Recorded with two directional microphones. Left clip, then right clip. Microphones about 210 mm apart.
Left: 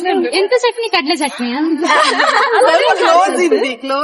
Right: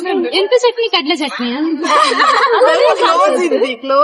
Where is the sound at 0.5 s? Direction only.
10° right (ahead or behind).